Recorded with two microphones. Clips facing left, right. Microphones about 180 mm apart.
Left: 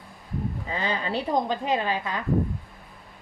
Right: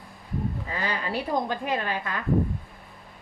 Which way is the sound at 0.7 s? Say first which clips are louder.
Left 4 dB; 25° left (ahead or behind).